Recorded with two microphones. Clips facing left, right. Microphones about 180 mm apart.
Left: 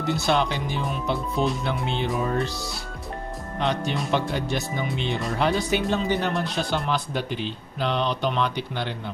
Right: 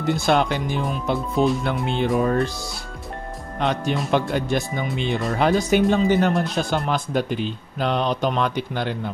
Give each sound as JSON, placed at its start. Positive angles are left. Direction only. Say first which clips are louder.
{"t": 0.0, "sound": "speech", "louder": "right 3 dB", "side_deg": -50}
{"t": 1.9, "sound": "speech", "louder": "right 7 dB", "side_deg": -50}
{"t": 3.5, "sound": "speech", "louder": "right 3 dB", "side_deg": -50}